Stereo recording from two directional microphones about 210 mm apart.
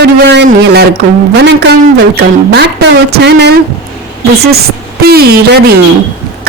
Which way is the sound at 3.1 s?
50° right (ahead or behind).